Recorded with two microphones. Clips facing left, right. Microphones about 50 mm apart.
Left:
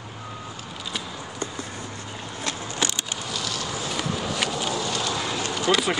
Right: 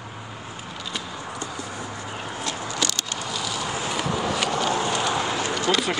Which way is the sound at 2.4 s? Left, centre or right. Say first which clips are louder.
Even; left.